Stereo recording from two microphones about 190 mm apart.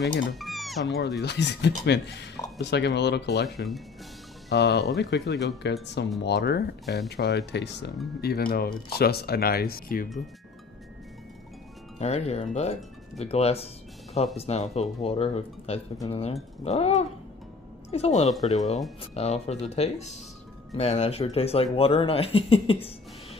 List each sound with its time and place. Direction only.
0.0 s speech: 75° left (ahead or behind)
0.4 s speech: centre (ahead or behind)
1.2 s speech: 60° left (ahead or behind)
12.0 s speech: 35° left (ahead or behind)